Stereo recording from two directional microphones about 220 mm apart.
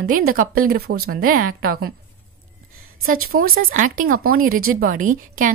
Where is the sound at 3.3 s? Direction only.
40° right (ahead or behind).